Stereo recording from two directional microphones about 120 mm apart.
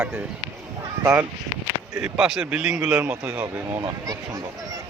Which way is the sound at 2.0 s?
5° right (ahead or behind).